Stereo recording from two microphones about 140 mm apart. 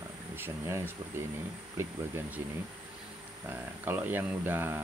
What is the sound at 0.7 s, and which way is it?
Speech, 20° right (ahead or behind).